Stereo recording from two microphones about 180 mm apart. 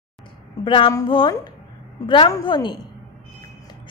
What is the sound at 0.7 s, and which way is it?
A woman's voice, 25° left (ahead or behind).